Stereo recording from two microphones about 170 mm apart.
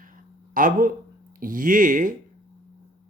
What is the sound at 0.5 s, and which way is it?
Speech, 55° right (ahead or behind).